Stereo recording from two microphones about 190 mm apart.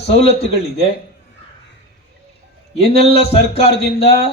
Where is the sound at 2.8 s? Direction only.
30° left (ahead or behind).